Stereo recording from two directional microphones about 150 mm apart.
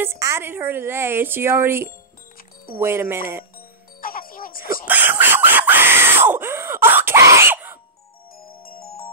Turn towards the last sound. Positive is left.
turn(degrees=-15)  # may be behind; listen again after turning